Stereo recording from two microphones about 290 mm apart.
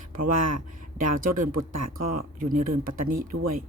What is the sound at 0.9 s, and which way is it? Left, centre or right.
Speech, right.